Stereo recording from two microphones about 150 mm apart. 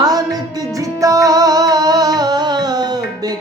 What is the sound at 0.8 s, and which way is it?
Music, 20° right (ahead or behind).